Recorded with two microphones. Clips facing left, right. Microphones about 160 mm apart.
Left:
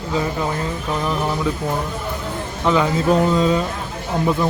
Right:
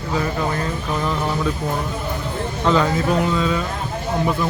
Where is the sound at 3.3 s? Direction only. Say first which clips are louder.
Left 4 dB; 30° left (ahead or behind).